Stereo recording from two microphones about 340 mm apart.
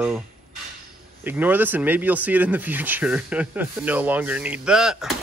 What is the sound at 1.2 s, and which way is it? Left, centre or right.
Speech, centre.